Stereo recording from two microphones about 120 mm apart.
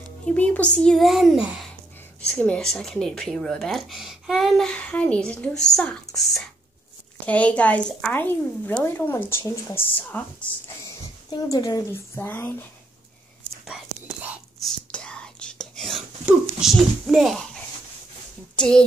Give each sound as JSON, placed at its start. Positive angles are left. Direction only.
{"t": 0.2, "sound": "a woman's voice", "side_deg": 10}
{"t": 2.2, "sound": "speech", "side_deg": 10}
{"t": 7.2, "sound": "a woman's voice", "side_deg": 10}
{"t": 11.2, "sound": "a woman's voice", "side_deg": 30}
{"t": 11.9, "sound": "a woman's voice", "side_deg": 20}
{"t": 14.6, "sound": "whispering", "side_deg": 5}
{"t": 16.3, "sound": "speech", "side_deg": -5}
{"t": 18.6, "sound": "speech", "side_deg": 5}